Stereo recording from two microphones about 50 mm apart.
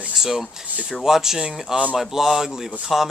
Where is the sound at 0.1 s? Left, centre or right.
Centre.